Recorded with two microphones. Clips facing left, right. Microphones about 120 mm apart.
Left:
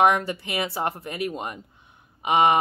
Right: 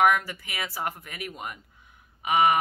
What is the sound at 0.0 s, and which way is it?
Speech, 25° left (ahead or behind).